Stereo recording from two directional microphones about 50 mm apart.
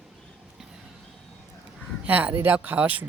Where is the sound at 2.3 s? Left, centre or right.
Right.